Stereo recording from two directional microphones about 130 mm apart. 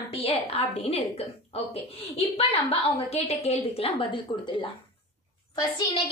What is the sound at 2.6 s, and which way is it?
A woman's voice, 55° left (ahead or behind).